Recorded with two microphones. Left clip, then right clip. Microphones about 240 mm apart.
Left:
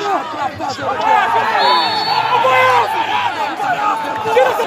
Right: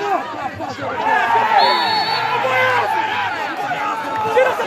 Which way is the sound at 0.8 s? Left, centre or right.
Left.